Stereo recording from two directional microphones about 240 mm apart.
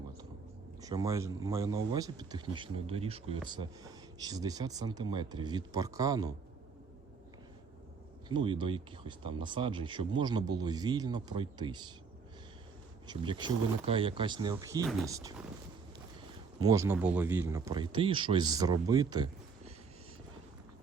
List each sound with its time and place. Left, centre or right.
0.8 s speech: centre
8.3 s speech: centre
13.1 s speech: centre
16.6 s speech: centre